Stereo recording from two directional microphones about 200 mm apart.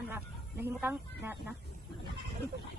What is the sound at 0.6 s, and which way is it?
Speech, 10° right (ahead or behind).